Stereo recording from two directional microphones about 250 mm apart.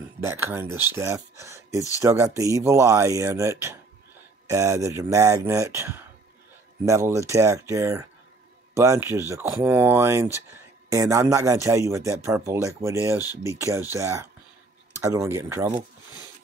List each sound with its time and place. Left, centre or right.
0.2 s speech: centre